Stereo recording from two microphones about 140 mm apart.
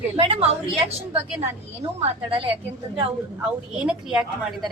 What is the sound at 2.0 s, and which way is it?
Speech, 40° right (ahead or behind).